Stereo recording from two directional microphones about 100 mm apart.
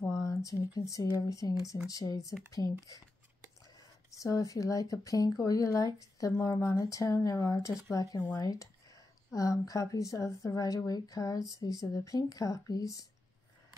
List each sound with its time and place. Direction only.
0.0 s a sound: 30° left (ahead or behind)
0.7 s speech: 35° left (ahead or behind)
4.2 s speech: 35° left (ahead or behind)